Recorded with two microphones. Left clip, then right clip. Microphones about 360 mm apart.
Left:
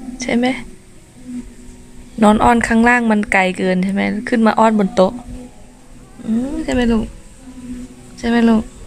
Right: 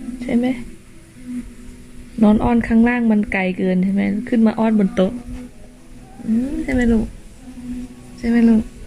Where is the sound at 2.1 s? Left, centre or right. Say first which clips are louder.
Left 5 dB; left.